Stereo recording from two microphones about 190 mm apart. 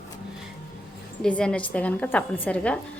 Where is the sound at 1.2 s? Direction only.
5° left (ahead or behind).